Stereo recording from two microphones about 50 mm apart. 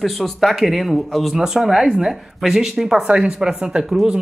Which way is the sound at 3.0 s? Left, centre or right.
Centre.